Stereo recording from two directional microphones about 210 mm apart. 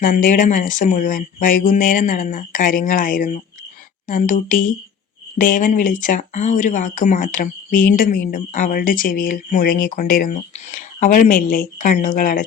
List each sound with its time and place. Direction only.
0.0 s speech: 40° left (ahead or behind)